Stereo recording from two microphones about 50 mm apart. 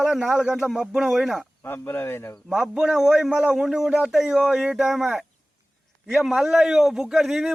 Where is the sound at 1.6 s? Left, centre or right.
Left.